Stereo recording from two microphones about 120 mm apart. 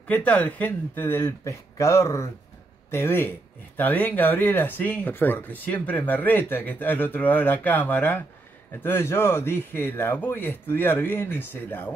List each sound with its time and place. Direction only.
0.1 s speech: 10° left (ahead or behind)